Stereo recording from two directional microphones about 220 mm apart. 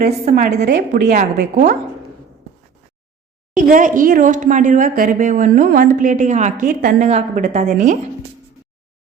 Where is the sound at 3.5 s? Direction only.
35° right (ahead or behind).